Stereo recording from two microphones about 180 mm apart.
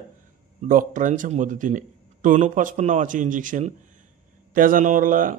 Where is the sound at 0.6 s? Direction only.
45° right (ahead or behind).